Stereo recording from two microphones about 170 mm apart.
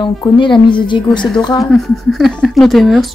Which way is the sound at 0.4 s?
30° left (ahead or behind).